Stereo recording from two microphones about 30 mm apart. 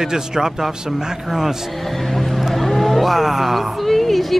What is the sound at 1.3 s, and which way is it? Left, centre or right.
Music, centre.